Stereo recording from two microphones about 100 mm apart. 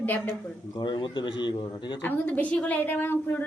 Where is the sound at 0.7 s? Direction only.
50° left (ahead or behind).